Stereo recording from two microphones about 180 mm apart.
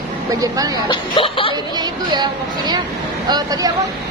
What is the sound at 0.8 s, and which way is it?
Speech, 30° left (ahead or behind).